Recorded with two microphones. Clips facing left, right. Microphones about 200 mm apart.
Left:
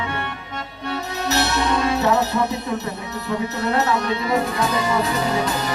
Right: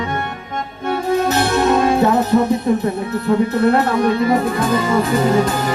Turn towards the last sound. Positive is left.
turn(degrees=-50)  # may be behind; listen again after turning